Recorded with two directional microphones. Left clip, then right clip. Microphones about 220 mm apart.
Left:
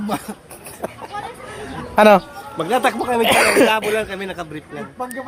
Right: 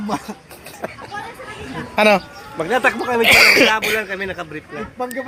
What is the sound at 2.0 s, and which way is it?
Speech, 20° left (ahead or behind).